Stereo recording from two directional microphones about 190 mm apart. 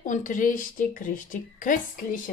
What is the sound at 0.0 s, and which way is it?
Speech, 45° left (ahead or behind).